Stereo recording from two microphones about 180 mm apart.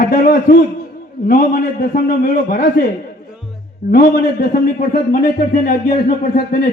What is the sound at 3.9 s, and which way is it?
A man's voice, 55° left (ahead or behind).